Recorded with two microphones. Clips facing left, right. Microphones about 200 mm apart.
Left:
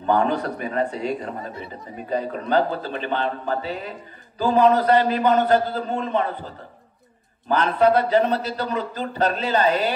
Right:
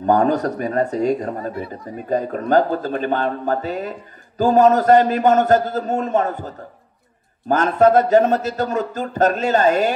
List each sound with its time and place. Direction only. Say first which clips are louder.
0.0 s speech: right 4 dB; 45° right (ahead or behind)